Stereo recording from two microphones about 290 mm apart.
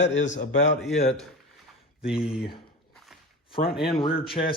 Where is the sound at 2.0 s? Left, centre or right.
Centre.